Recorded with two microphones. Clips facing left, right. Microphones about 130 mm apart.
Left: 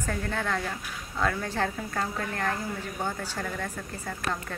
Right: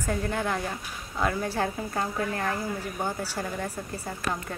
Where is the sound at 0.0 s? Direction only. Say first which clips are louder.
Right 2 dB; 15° right (ahead or behind).